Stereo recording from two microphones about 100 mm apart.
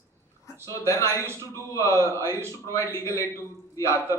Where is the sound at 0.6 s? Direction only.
30° left (ahead or behind).